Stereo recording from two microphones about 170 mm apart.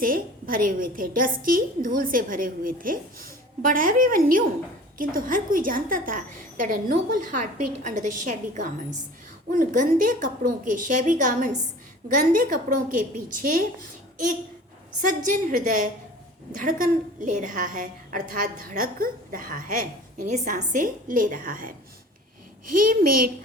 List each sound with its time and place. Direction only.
0.0 s a woman's voice: 55° right (ahead or behind)
15.0 s a woman's voice: 50° right (ahead or behind)